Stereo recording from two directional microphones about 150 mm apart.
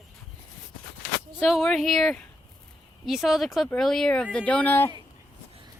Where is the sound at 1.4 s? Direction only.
Centre (ahead or behind).